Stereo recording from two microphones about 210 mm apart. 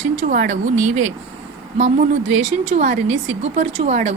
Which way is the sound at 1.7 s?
35° right (ahead or behind).